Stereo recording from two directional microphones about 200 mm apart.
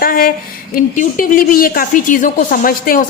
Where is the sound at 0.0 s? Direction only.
45° left (ahead or behind).